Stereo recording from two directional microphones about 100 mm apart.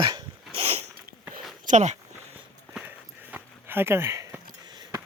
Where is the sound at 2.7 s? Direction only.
15° right (ahead or behind).